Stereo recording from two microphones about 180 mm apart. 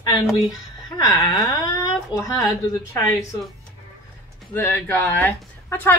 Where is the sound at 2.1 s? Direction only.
20° left (ahead or behind).